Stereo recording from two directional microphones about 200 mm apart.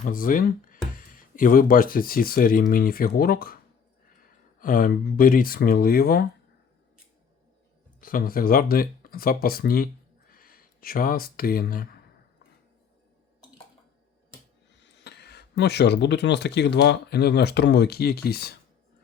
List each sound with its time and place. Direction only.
0.0 s speech: 45° left (ahead or behind)
4.6 s speech: 45° left (ahead or behind)
8.0 s speech: 45° left (ahead or behind)
14.8 s speech: 60° left (ahead or behind)